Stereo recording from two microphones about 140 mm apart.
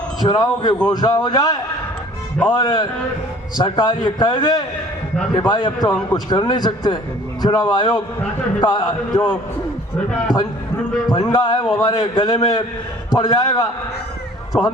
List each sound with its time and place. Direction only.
0.2 s a man's voice: 30° left (ahead or behind)
10.3 s a man's voice: 30° left (ahead or behind)